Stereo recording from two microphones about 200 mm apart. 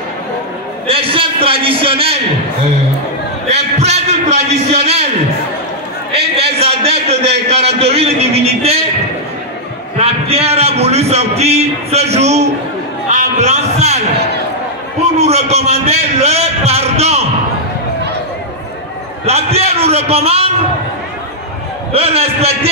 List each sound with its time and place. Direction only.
0.8 s a man's voice: 25° right (ahead or behind)
3.5 s a man's voice: 35° right (ahead or behind)
6.1 s a man's voice: 30° right (ahead or behind)
9.9 s a man's voice: 30° right (ahead or behind)
15.1 s a man's voice: 30° right (ahead or behind)
19.2 s a man's voice: 30° right (ahead or behind)
21.9 s a man's voice: 30° right (ahead or behind)